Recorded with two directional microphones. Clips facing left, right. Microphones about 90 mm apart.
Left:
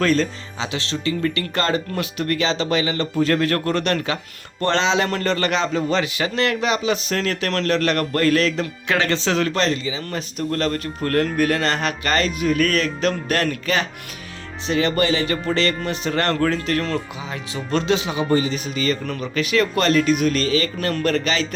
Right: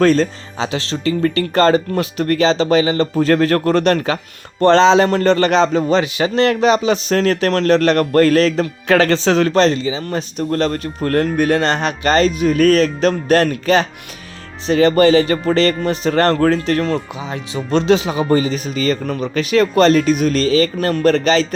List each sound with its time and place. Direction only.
0.0 s a man's voice: 35° right (ahead or behind)
17.8 s a man's voice: 35° right (ahead or behind)